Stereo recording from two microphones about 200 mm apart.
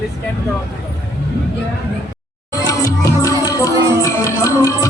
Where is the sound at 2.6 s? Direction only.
15° left (ahead or behind).